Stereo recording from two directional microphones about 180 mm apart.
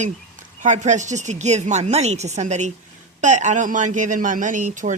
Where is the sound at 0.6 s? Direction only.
45° right (ahead or behind).